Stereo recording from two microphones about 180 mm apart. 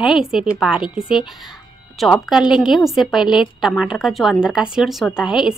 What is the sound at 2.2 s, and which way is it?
A woman's voice, 5° right (ahead or behind).